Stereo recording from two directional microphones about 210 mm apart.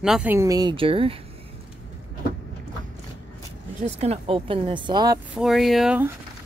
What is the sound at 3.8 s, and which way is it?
Speech, 30° right (ahead or behind).